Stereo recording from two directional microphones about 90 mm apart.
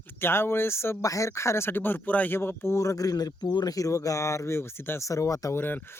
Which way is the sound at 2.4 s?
30° left (ahead or behind).